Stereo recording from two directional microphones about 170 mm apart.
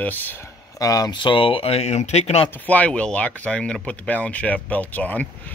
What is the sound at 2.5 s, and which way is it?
Speech, 10° left (ahead or behind).